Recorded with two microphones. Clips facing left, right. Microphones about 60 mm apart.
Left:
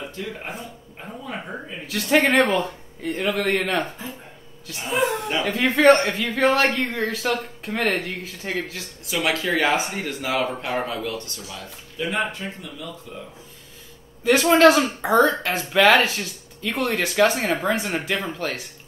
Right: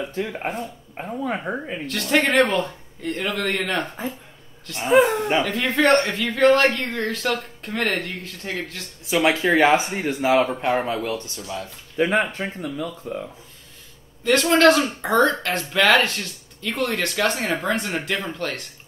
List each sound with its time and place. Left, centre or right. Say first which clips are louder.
0.1 s speech: right 5 dB; right
1.9 s speech: left 2 dB; centre
4.8 s speech: right 7 dB; right
5.4 s speech: left 7 dB; centre
9.0 s speech: right 4 dB; right
12.0 s speech: right 5 dB; right
14.2 s speech: left 1 dB; centre